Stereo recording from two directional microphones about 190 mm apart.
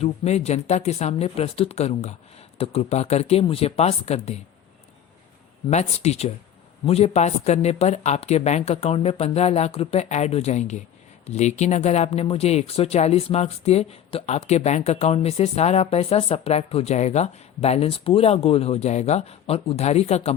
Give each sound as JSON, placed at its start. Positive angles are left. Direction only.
{"t": 0.0, "sound": "speech", "side_deg": 35}
{"t": 5.6, "sound": "speech", "side_deg": 35}